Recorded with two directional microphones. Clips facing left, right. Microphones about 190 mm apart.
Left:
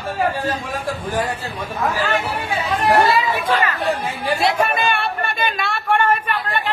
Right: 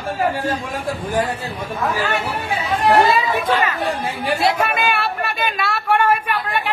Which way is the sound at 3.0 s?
20° right (ahead or behind).